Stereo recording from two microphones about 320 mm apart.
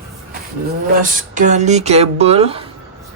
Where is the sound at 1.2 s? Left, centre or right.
Right.